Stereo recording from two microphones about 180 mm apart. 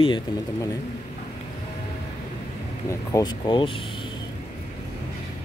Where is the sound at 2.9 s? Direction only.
20° left (ahead or behind).